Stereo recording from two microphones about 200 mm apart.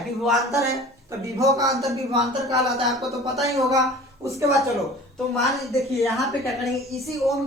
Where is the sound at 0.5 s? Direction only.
15° right (ahead or behind).